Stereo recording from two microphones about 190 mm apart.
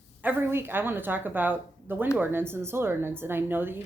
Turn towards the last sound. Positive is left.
turn(degrees=-10)  # may be behind; listen again after turning